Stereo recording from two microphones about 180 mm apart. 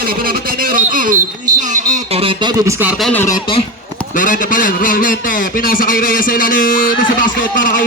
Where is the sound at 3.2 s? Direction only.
25° left (ahead or behind).